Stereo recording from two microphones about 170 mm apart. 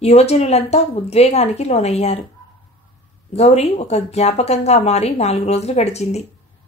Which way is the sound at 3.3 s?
40° left (ahead or behind).